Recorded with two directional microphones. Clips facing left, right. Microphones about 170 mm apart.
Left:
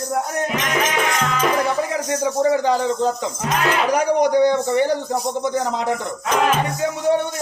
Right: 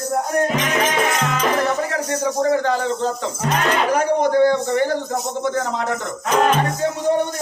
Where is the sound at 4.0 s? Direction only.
15° left (ahead or behind).